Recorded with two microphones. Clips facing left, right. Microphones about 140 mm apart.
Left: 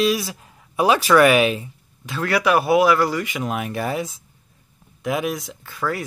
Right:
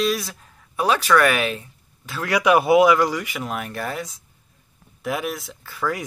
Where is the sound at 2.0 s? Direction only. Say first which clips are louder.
Even; 10° right (ahead or behind).